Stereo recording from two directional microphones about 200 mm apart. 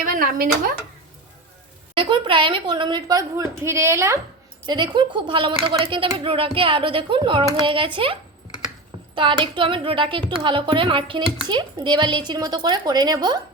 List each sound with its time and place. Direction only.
0.0 s speech: 45° right (ahead or behind)
2.0 s speech: 25° right (ahead or behind)